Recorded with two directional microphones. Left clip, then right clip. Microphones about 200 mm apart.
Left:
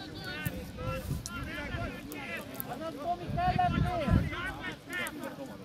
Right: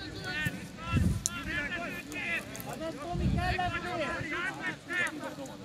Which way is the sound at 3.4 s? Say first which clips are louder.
Left 3 dB; 55° left (ahead or behind).